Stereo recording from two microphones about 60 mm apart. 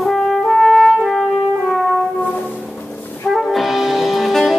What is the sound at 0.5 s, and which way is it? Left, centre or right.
Music, centre.